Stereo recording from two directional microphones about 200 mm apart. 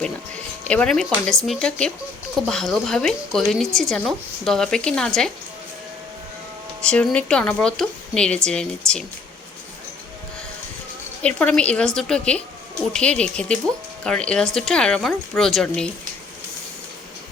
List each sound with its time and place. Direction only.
0.7 s a woman's voice: 5° left (ahead or behind)
6.8 s a woman's voice: 5° left (ahead or behind)
11.2 s a woman's voice: 5° left (ahead or behind)